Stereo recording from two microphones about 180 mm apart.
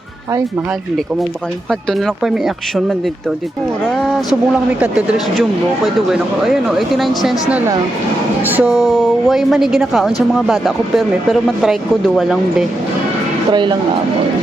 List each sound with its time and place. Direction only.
1.9 s speech: centre (ahead or behind)
3.8 s speech: centre (ahead or behind)
13.5 s speech: 25° right (ahead or behind)